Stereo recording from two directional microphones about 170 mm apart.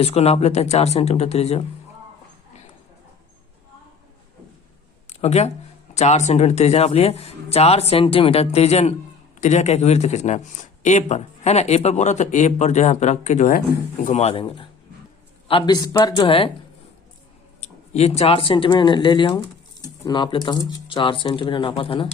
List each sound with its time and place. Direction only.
0.0 s speech: 40° left (ahead or behind)
5.0 s a sound: 40° left (ahead or behind)
5.9 s a man's voice: 40° left (ahead or behind)
17.6 s speech: 40° left (ahead or behind)